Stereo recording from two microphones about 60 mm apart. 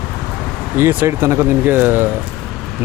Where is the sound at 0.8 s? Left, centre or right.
Right.